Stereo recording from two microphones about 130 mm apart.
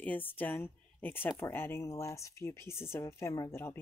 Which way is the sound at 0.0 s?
15° left (ahead or behind).